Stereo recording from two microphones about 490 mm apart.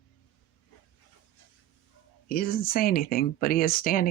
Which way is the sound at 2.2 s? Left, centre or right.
Centre.